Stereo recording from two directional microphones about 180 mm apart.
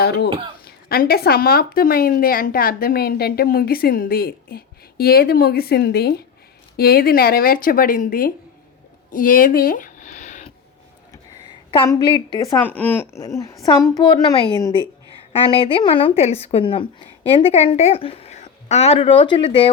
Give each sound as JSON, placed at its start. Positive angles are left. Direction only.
{"t": 0.6, "sound": "speech", "side_deg": 55}
{"t": 9.0, "sound": "a sound", "side_deg": 50}
{"t": 11.7, "sound": "a woman's voice", "side_deg": 25}